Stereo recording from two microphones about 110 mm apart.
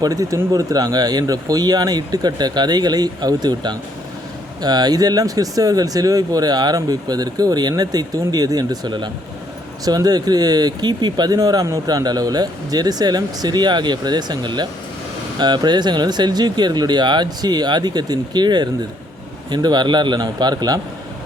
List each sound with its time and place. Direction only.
0.0 s speech: 35° right (ahead or behind)